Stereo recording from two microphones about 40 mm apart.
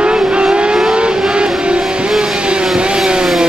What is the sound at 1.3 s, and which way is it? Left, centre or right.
Music, right.